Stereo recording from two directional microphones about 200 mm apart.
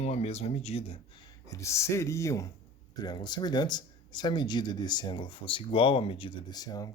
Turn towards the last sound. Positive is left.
turn(degrees=20)  # may be behind; listen again after turning